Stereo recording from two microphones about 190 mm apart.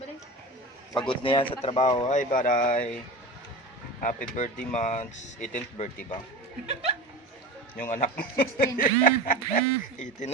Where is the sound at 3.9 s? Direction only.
45° left (ahead or behind).